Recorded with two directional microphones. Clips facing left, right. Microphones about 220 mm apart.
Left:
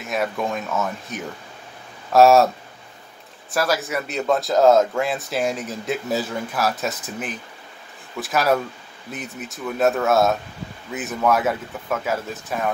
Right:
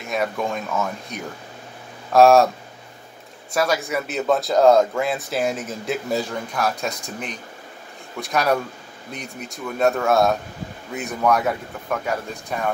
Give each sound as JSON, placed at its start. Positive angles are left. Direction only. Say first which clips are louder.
{"t": 0.0, "sound": "a man's voice", "louder": "even", "side_deg": 0}
{"t": 3.5, "sound": "a man's voice", "louder": "right 1 dB", "side_deg": 0}